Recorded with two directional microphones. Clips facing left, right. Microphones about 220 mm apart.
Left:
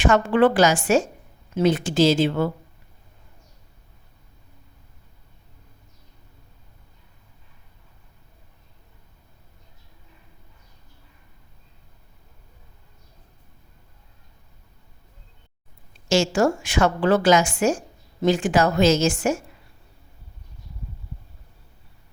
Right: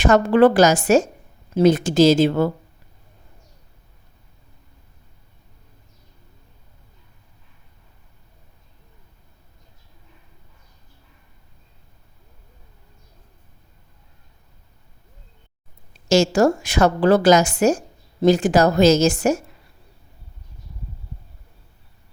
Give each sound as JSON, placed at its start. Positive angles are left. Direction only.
{"t": 0.0, "sound": "a woman's voice", "side_deg": -40}
{"t": 16.0, "sound": "a woman's voice", "side_deg": -40}